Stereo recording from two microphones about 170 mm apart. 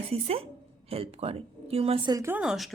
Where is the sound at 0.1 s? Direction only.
35° right (ahead or behind).